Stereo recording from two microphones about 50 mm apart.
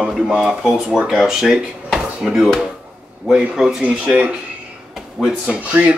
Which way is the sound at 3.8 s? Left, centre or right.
Right.